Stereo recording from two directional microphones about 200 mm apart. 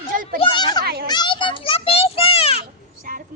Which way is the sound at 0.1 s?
45° right (ahead or behind).